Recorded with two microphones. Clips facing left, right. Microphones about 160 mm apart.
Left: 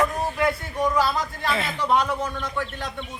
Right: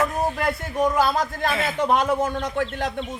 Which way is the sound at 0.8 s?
50° right (ahead or behind).